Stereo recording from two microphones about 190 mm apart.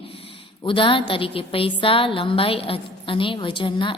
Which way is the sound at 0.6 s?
25° left (ahead or behind).